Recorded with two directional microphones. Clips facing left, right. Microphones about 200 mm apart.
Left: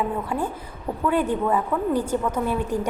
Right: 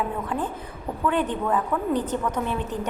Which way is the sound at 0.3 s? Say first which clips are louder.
Left 1 dB; 10° left (ahead or behind).